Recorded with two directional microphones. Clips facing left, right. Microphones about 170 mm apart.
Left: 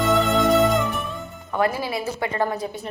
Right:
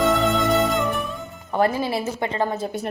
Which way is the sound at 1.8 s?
25° right (ahead or behind).